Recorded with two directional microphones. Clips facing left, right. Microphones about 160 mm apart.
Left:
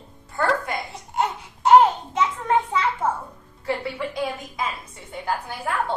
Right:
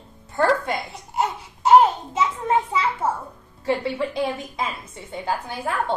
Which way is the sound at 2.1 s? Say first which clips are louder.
Even; 10° right (ahead or behind).